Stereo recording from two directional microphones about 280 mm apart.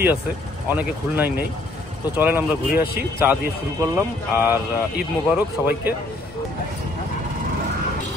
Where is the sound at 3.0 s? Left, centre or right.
Centre.